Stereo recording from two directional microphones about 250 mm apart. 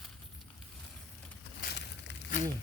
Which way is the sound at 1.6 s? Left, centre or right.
Left.